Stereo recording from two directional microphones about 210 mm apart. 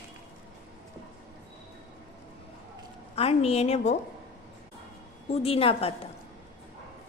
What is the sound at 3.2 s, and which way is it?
Speech, 30° left (ahead or behind).